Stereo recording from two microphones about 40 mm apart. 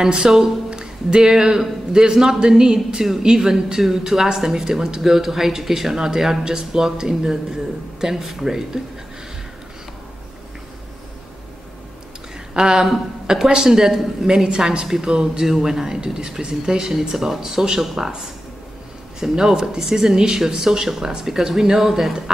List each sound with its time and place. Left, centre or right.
0.0 s speech: centre
12.5 s speech: centre
19.1 s speech: centre